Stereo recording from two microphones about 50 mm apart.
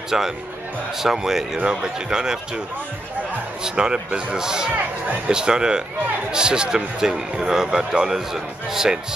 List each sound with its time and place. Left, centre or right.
0.1 s speech: centre
3.6 s speech: centre